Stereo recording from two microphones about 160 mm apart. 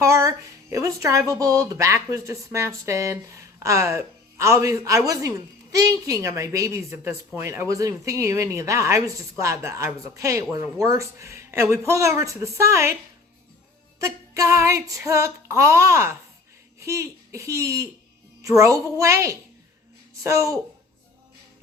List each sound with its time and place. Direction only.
0.0 s a sound: 20° right (ahead or behind)
0.7 s speech: 20° right (ahead or behind)
14.0 s female singing: 20° right (ahead or behind)
16.8 s speech: 20° right (ahead or behind)